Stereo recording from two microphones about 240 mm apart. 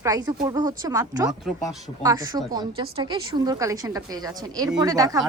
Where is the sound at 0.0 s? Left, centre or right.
Centre.